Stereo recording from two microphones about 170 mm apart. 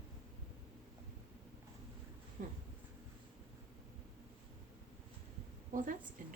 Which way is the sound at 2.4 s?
50° right (ahead or behind).